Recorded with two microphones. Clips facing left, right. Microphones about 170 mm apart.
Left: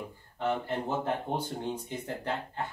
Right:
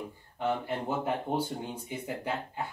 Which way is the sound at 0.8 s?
10° right (ahead or behind).